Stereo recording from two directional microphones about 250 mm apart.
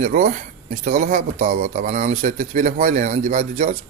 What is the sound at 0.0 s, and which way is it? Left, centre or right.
Speech, right.